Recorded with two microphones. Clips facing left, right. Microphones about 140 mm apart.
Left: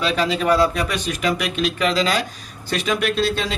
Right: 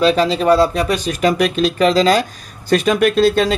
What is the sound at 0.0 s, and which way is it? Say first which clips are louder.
Speech: right 6 dB; 35° right (ahead or behind).